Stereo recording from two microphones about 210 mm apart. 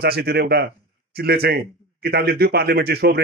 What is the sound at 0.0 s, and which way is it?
A man's voice, 50° right (ahead or behind).